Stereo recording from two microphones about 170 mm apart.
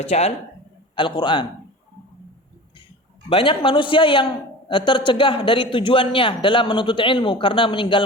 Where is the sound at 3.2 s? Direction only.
30° left (ahead or behind).